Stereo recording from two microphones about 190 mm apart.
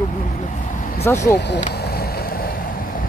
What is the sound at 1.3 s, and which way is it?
Speech, 65° left (ahead or behind).